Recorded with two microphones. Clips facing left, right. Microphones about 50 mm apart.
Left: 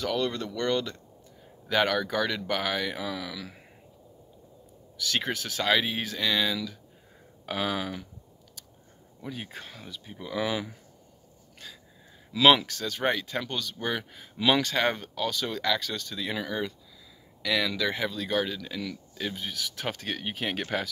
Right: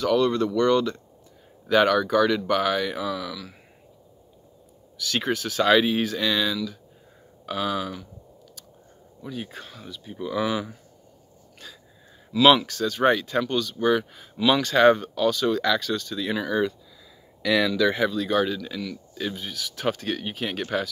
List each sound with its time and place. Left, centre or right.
0.0 s speech: centre
3.0 s speech: centre
4.9 s speech: centre
5.6 s speech: centre
7.4 s speech: left
9.2 s speech: centre
12.4 s speech: centre
14.8 s speech: centre